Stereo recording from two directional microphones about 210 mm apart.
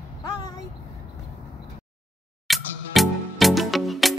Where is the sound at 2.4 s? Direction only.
Centre (ahead or behind).